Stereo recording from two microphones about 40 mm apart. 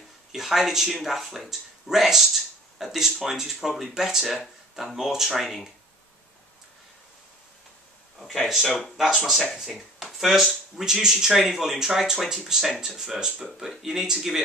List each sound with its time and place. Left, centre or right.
0.3 s speech: centre
4.4 s speech: centre
4.9 s speech: centre
8.6 s speech: centre
8.9 s speech: centre